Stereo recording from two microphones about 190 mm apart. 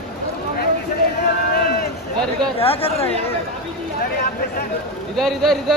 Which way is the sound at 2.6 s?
30° left (ahead or behind).